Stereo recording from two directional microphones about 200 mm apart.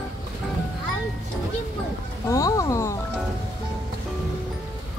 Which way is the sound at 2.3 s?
15° left (ahead or behind).